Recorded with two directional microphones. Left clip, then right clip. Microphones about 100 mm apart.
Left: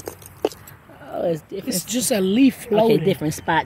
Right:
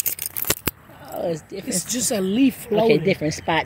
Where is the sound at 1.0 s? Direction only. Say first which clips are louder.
Left 4 dB; 90° left.